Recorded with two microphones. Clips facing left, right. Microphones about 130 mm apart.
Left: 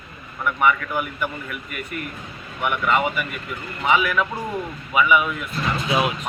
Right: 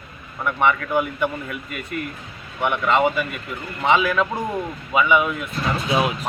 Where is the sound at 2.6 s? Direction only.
25° right (ahead or behind).